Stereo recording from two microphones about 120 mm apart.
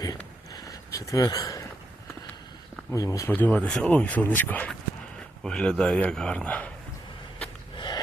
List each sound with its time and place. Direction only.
0.5 s a sound: 30° left (ahead or behind)
2.9 s speech: 25° left (ahead or behind)
3.3 s speech: 15° left (ahead or behind)
7.8 s snort: 35° left (ahead or behind)